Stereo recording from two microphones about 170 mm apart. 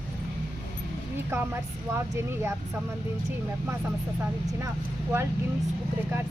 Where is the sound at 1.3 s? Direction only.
15° right (ahead or behind).